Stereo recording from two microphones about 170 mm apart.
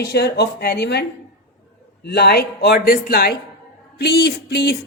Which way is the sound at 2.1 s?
70° left (ahead or behind).